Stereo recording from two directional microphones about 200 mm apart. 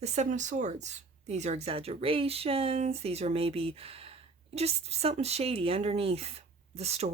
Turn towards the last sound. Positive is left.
turn(degrees=-30)  # may be behind; listen again after turning